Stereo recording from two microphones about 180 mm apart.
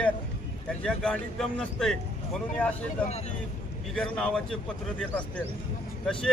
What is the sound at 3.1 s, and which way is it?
Speech, 35° left (ahead or behind).